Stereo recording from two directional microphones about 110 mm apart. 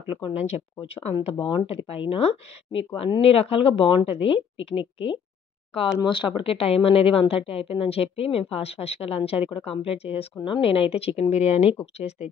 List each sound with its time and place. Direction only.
0.1 s speech: 65° left (ahead or behind)
1.4 s speech: 50° left (ahead or behind)
6.0 s speech: 45° left (ahead or behind); by 11.7 s 70° left (ahead or behind)